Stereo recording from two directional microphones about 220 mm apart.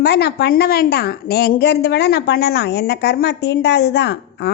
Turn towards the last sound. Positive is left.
turn(degrees=50)  # may be behind; listen again after turning